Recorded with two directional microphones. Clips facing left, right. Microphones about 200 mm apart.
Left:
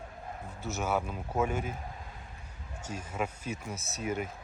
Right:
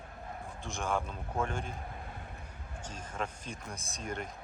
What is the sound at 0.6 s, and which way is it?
Speech, 5° left (ahead or behind).